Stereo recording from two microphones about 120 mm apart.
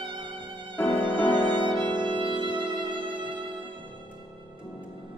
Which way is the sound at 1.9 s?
40° right (ahead or behind).